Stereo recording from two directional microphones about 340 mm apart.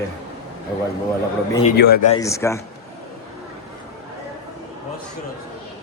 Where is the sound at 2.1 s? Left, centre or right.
Centre.